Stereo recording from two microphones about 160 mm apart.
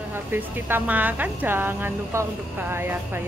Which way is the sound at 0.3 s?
15° right (ahead or behind).